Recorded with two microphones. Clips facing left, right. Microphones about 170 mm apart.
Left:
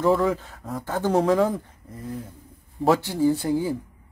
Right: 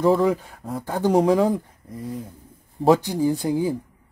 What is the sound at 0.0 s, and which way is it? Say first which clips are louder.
Speech: right 2 dB; centre (ahead or behind).